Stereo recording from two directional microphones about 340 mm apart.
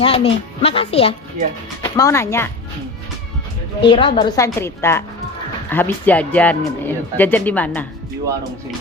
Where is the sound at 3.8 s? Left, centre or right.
Centre.